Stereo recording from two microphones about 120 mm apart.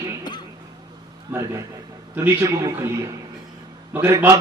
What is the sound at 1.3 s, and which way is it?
A man's voice, 25° right (ahead or behind).